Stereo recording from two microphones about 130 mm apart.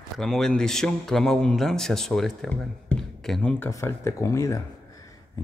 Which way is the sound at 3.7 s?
20° left (ahead or behind).